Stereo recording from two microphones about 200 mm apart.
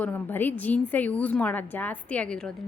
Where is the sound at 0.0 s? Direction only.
10° left (ahead or behind).